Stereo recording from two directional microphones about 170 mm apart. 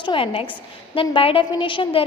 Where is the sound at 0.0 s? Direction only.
30° left (ahead or behind).